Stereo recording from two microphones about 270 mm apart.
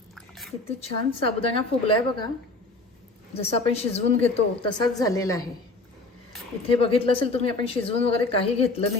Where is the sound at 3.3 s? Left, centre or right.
Left.